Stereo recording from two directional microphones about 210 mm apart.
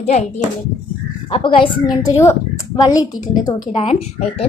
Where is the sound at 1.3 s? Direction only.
25° left (ahead or behind).